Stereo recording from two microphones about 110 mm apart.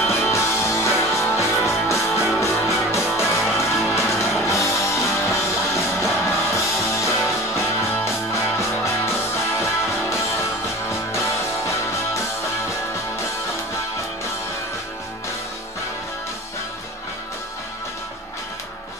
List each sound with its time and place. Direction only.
0.0 s music: 25° left (ahead or behind)